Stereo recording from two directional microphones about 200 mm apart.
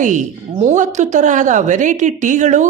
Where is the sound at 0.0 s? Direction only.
40° right (ahead or behind).